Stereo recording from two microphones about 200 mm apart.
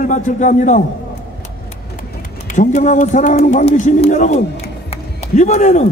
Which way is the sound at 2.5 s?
35° left (ahead or behind).